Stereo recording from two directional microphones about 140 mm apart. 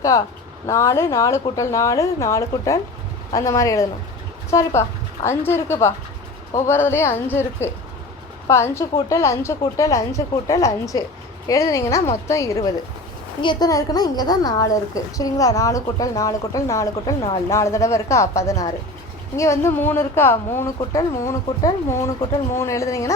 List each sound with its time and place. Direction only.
0.7 s a woman's voice: 20° left (ahead or behind)